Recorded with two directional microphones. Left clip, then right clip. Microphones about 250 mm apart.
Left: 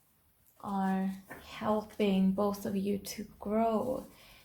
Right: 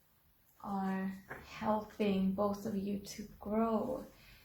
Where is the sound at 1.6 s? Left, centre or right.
Left.